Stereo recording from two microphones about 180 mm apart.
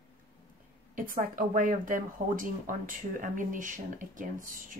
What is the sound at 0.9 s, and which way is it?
Speech, 50° right (ahead or behind).